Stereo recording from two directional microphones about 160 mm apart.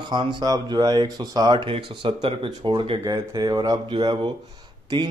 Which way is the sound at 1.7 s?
35° right (ahead or behind).